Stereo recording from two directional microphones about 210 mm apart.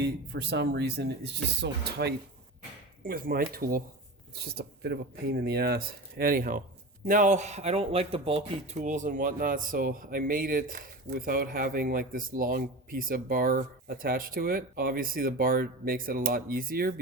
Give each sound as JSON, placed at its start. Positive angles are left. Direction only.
{"t": 0.0, "sound": "speech", "side_deg": -50}